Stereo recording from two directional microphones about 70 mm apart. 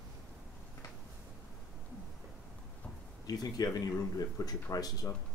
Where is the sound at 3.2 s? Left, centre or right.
Left.